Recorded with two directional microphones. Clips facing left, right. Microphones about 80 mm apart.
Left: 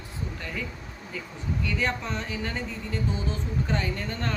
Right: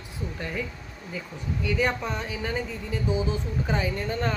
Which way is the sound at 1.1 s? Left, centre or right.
Centre.